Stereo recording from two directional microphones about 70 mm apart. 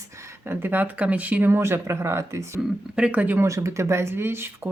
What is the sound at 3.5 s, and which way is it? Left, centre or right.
Speech, right.